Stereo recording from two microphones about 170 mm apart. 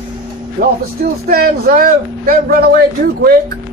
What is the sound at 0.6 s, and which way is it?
Speech, 60° right (ahead or behind).